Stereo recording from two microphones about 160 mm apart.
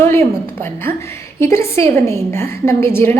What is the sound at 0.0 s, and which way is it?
A woman's voice, 15° left (ahead or behind).